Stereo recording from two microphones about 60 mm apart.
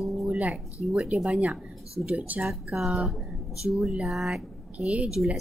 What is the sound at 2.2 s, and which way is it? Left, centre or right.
Speech, centre.